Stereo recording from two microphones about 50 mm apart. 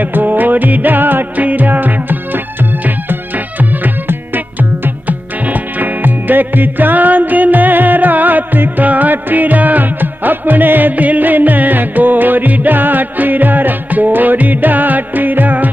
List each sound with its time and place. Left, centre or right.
0.0 s music: right